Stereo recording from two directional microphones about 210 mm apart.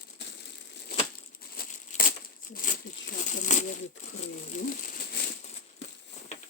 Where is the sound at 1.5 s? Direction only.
45° left (ahead or behind).